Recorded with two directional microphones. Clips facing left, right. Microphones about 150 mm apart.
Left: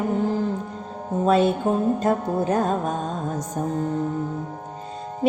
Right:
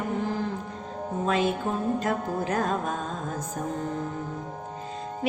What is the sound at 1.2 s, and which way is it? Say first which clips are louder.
Music: left 7 dB; 35° left (ahead or behind).